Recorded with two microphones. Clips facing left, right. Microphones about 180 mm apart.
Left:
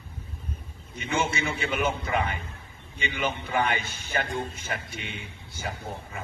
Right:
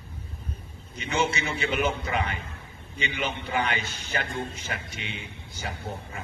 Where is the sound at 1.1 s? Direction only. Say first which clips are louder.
Right 1 dB; 50° left (ahead or behind).